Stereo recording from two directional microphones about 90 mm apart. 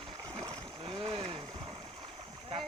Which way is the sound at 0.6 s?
80° right.